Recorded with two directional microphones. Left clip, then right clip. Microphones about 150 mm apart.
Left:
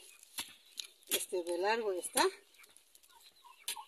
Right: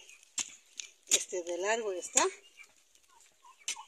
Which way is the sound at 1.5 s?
25° left (ahead or behind).